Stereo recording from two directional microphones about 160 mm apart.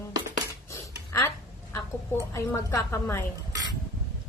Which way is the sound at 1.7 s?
20° left (ahead or behind).